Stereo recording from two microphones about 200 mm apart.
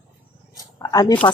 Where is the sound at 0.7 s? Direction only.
20° left (ahead or behind).